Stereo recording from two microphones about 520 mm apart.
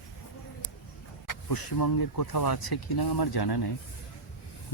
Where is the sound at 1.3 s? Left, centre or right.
Left.